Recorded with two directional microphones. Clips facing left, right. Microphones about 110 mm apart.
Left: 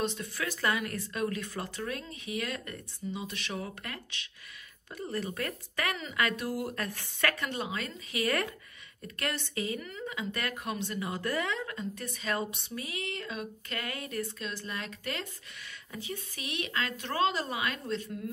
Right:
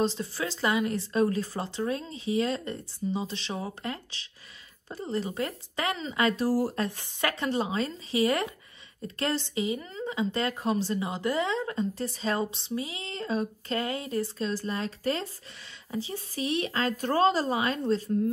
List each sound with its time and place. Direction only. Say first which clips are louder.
0.0 s speech: right 5 dB; 30° right (ahead or behind)
7.0 s speech: right 2 dB; 20° right (ahead or behind)